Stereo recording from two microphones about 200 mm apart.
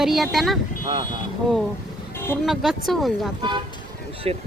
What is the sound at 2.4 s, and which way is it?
Speech, centre (ahead or behind).